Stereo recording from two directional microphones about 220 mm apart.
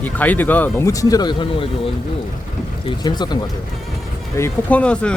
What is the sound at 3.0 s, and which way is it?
Speech, 20° left (ahead or behind).